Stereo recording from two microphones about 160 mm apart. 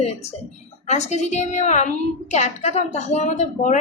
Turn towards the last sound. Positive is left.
turn(degrees=50)  # may be behind; listen again after turning